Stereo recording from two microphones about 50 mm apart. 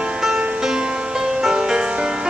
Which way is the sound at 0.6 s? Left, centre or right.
Centre.